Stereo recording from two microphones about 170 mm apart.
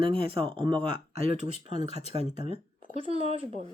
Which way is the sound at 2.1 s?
35° right (ahead or behind).